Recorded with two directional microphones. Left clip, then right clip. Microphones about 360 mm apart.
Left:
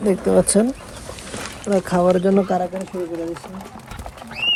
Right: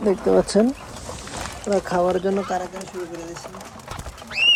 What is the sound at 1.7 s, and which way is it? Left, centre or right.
Speech, centre.